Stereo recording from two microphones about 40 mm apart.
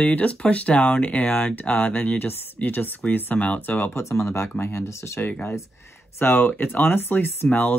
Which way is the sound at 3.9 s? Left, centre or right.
Left.